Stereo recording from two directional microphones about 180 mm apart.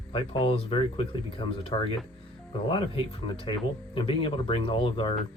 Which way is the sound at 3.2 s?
30° left (ahead or behind).